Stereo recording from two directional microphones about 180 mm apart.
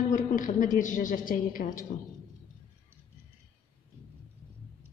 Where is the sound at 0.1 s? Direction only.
45° left (ahead or behind).